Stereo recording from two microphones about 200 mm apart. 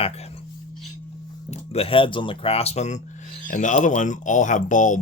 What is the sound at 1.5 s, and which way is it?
Speech, 30° left (ahead or behind).